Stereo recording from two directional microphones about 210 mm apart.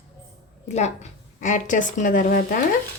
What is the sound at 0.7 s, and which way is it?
Speech, 35° left (ahead or behind).